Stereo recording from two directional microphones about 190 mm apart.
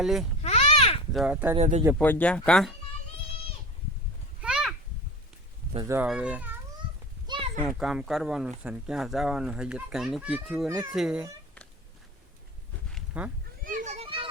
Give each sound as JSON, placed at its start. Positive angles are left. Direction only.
{"t": 0.0, "sound": "speech", "side_deg": 0}
{"t": 0.4, "sound": "babbling", "side_deg": 35}
{"t": 1.1, "sound": "speech", "side_deg": -5}
{"t": 1.5, "sound": "speech", "side_deg": -35}
{"t": 2.0, "sound": "speech", "side_deg": 10}
{"t": 4.4, "sound": "a sound", "side_deg": -5}
{"t": 5.7, "sound": "speech", "side_deg": -15}
{"t": 6.1, "sound": "speech", "side_deg": -5}
{"t": 7.3, "sound": "a sound", "side_deg": -25}
{"t": 7.7, "sound": "speech", "side_deg": -5}
{"t": 10.7, "sound": "speech", "side_deg": -15}
{"t": 10.9, "sound": "speech", "side_deg": -5}
{"t": 12.9, "sound": "a sound", "side_deg": -5}
{"t": 13.7, "sound": "children playing", "side_deg": -40}